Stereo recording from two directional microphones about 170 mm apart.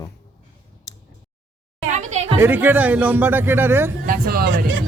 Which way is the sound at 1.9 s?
45° right (ahead or behind).